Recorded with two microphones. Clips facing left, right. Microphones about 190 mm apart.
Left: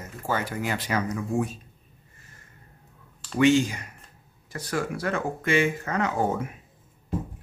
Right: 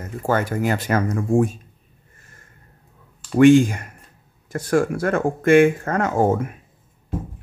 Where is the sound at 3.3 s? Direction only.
50° right (ahead or behind).